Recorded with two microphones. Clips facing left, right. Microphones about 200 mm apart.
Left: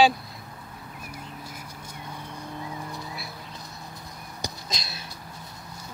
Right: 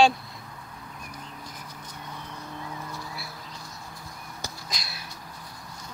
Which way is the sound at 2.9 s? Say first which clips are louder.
Left 1 dB; 20° left (ahead or behind).